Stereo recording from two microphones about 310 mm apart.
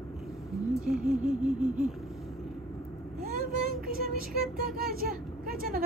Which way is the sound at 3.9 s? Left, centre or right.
Right.